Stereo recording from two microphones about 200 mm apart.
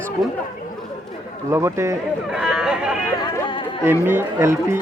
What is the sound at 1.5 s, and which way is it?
Speech, 15° right (ahead or behind).